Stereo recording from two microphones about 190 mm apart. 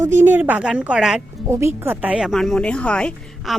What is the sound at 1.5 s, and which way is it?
Speech, 15° right (ahead or behind).